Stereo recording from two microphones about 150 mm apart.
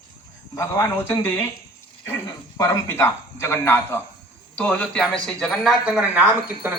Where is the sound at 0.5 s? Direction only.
20° left (ahead or behind).